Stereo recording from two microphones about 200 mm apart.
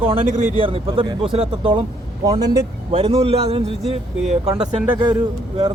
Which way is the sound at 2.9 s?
30° right (ahead or behind).